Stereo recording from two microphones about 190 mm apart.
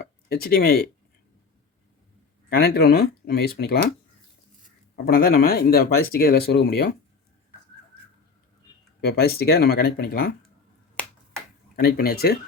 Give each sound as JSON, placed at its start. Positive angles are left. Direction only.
{"t": 0.0, "sound": "speech", "side_deg": 55}
{"t": 2.5, "sound": "speech", "side_deg": 55}
{"t": 5.0, "sound": "speech", "side_deg": 50}
{"t": 9.0, "sound": "speech", "side_deg": 55}
{"t": 11.8, "sound": "speech", "side_deg": 55}